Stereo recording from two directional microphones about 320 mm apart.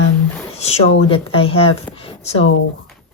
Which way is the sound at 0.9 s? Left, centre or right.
Centre.